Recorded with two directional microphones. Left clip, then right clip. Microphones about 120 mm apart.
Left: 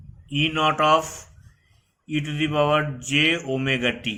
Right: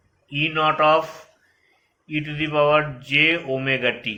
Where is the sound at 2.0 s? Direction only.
50° left (ahead or behind).